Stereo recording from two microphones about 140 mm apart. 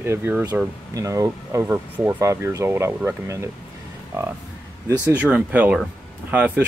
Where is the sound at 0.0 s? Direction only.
15° right (ahead or behind).